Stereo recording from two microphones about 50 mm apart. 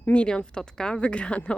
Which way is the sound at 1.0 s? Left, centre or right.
Left.